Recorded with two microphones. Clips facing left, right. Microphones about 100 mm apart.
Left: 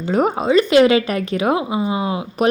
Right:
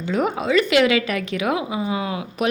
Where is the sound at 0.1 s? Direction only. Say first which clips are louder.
Left 4 dB; 40° left (ahead or behind).